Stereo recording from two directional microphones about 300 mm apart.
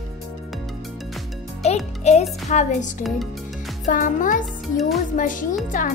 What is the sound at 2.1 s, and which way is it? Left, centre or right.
Speech, left.